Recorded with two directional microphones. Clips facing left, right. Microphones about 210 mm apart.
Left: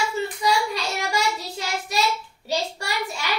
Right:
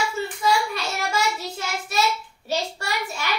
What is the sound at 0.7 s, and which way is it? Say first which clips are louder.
Child singing: left 1 dB; 15° left (ahead or behind).